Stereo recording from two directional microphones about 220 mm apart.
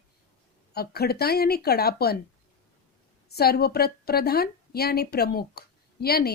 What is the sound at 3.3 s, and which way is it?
A woman's voice, 45° left (ahead or behind).